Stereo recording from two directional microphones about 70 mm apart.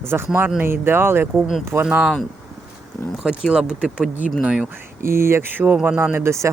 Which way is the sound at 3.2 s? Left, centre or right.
Centre.